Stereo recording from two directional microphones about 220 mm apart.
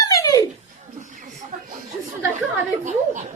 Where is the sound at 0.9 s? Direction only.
35° right (ahead or behind).